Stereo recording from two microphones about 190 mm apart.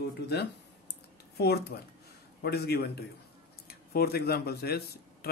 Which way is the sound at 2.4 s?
60° left (ahead or behind).